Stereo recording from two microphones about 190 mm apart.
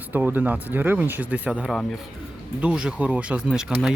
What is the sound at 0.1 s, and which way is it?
Speech, 10° right (ahead or behind).